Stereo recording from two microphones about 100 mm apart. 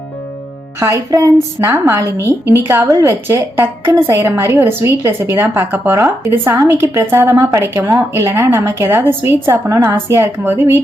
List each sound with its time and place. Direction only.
0.8 s a woman's voice: 30° right (ahead or behind)
7.6 s a woman's voice: 20° right (ahead or behind)